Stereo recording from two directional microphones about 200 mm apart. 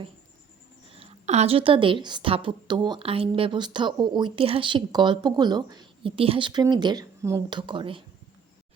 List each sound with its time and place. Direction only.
0.9 s a woman's voice: 30° right (ahead or behind)